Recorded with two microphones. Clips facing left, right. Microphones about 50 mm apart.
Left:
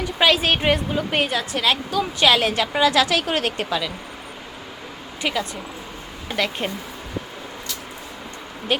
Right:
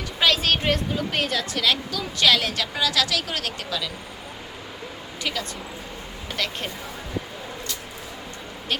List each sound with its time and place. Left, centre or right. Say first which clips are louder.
0.0 s a woman's voice: left 4 dB; centre
5.2 s a woman's voice: left 5 dB; left